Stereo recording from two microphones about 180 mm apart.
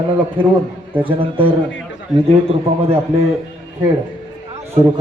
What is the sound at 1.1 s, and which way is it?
Speech, 30° right (ahead or behind).